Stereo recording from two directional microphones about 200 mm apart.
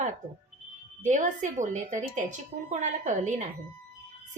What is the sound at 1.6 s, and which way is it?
Speech, 40° right (ahead or behind).